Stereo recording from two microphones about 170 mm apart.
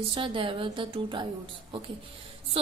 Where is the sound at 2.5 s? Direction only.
35° right (ahead or behind).